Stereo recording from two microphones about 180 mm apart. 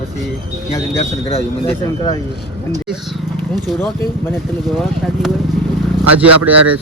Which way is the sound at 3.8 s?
10° left (ahead or behind).